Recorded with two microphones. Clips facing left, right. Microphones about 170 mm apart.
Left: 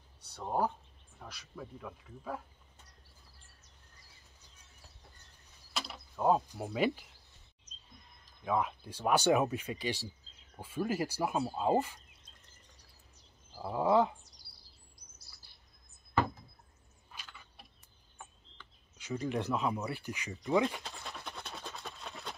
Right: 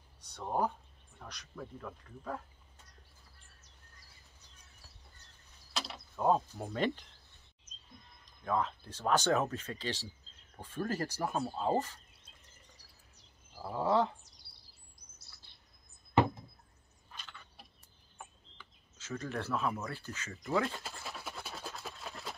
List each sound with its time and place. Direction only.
0.3 s speech: 5° left (ahead or behind)
5.7 s mechanisms: centre (ahead or behind)
6.1 s speech: 5° left (ahead or behind)
8.3 s speech: 10° left (ahead or behind)
13.6 s speech: 10° left (ahead or behind)
17.1 s a sound: 10° left (ahead or behind)
18.1 s bird: centre (ahead or behind)
18.9 s speech: 15° left (ahead or behind)
20.8 s a sound: centre (ahead or behind)